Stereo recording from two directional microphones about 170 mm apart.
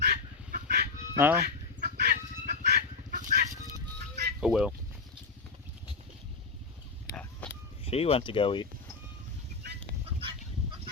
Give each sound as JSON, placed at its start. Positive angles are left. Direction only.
{"t": 0.0, "sound": "bird", "side_deg": -65}
{"t": 1.1, "sound": "speech", "side_deg": -15}
{"t": 1.4, "sound": "chicken", "side_deg": -65}
{"t": 4.4, "sound": "speech", "side_deg": 0}
{"t": 7.9, "sound": "speech", "side_deg": 35}
{"t": 10.2, "sound": "fowl", "side_deg": -35}